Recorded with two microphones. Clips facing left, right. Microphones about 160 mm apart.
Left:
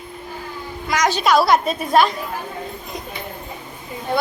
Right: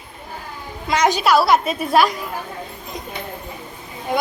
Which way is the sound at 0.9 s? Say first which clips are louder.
Right 2 dB; 25° right (ahead or behind).